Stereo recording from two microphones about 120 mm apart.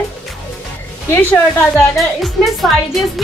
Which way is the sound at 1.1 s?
15° left (ahead or behind).